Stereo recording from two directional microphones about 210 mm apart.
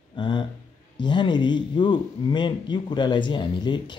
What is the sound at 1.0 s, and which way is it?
Speech, 20° left (ahead or behind).